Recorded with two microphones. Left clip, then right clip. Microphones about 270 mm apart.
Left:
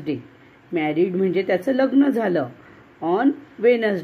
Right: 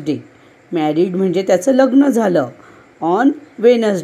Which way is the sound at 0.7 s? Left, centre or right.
Right.